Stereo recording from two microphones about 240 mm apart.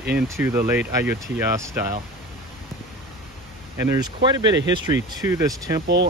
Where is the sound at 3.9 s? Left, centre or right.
Centre.